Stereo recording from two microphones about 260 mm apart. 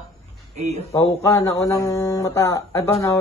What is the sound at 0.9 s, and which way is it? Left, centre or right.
Speech, centre.